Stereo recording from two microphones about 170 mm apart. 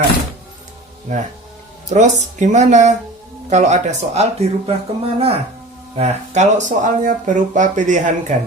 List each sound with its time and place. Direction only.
1.1 s speech: 45° right (ahead or behind)